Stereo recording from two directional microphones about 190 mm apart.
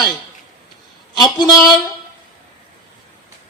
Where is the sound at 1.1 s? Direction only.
20° left (ahead or behind).